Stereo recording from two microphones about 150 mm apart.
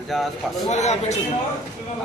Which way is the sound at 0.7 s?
50° left (ahead or behind).